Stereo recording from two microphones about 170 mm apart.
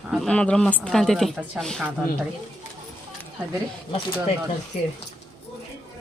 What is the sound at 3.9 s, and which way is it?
Speech, 30° left (ahead or behind).